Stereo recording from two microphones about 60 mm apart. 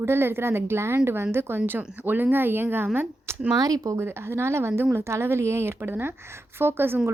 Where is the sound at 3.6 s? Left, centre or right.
Right.